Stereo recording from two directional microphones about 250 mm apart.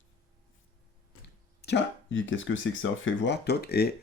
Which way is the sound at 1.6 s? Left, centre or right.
Left.